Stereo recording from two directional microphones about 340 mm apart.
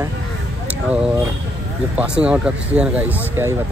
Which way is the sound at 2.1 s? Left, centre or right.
Centre.